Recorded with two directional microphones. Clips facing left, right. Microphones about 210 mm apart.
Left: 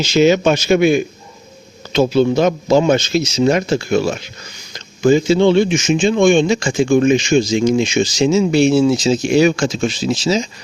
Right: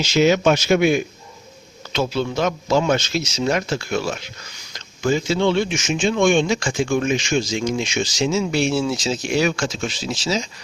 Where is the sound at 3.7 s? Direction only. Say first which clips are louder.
Left 7 dB; 20° left (ahead or behind).